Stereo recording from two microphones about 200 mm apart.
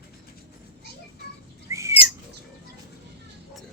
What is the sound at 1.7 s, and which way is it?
Bird flight, 15° right (ahead or behind).